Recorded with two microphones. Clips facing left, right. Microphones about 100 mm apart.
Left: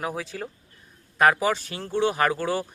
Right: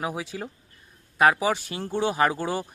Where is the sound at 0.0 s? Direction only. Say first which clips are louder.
Even; 15° right (ahead or behind).